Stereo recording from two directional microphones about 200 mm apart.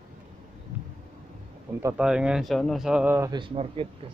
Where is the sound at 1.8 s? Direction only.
5° right (ahead or behind); by 3.9 s 30° right (ahead or behind).